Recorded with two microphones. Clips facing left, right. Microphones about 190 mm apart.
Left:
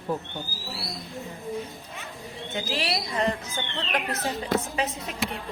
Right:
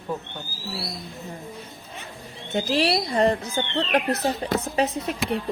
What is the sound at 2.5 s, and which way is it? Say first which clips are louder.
Speech: right 8 dB; 35° right (ahead or behind).